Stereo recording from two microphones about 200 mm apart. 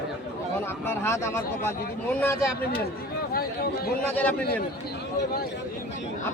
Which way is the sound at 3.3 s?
50° left (ahead or behind).